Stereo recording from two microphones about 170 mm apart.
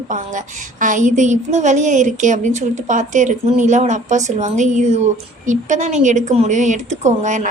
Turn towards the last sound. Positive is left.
turn(degrees=-45)  # may be behind; listen again after turning